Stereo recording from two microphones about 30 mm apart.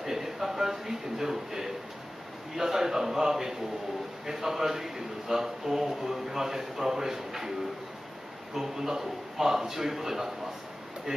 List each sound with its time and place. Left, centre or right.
0.0 s speech: centre
8.5 s speech: centre
11.1 s speech: right